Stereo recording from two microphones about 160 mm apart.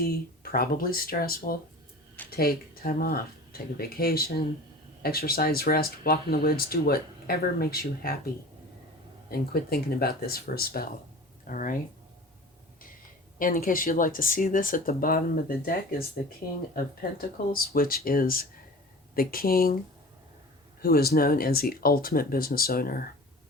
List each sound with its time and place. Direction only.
0.5 s speech: 65° left (ahead or behind)
9.3 s speech: 70° left (ahead or behind)
11.4 s speech: 60° left (ahead or behind)
13.4 s speech: 60° left (ahead or behind)
20.8 s speech: 70° left (ahead or behind)